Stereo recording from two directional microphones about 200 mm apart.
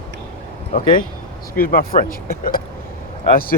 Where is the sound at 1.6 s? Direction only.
45° left (ahead or behind).